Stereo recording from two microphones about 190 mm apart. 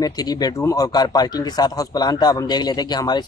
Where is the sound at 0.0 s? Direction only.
20° left (ahead or behind).